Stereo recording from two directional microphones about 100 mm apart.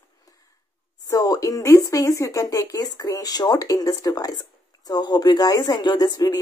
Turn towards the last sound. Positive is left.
turn(degrees=40)  # may be behind; listen again after turning